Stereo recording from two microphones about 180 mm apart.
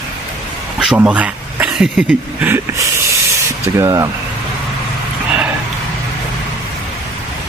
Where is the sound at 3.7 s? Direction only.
15° right (ahead or behind).